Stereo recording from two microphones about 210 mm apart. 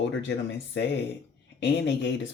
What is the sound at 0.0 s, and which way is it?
Speech, 55° left (ahead or behind).